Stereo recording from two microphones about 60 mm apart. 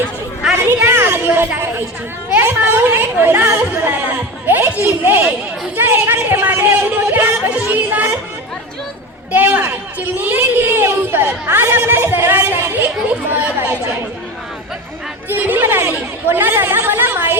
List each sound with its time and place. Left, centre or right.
0.9 s a sound: right
2.4 s a woman's voice: right
9.3 s a woman's voice: right
15.3 s a woman's voice: right